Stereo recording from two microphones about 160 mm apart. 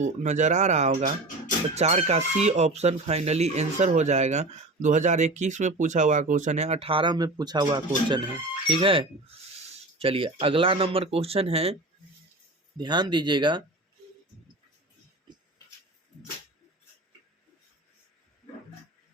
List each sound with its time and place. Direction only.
0.0 s speech: 45° right (ahead or behind)
12.7 s speech: 25° right (ahead or behind)